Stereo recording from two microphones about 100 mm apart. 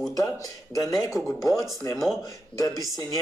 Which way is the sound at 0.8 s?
35° left (ahead or behind).